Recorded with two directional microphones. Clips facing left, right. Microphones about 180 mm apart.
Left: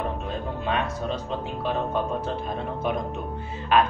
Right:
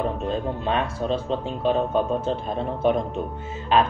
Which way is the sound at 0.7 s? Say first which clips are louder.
Right 2 dB; 25° right (ahead or behind).